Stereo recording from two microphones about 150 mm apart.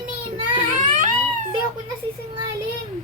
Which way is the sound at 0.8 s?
60° right (ahead or behind).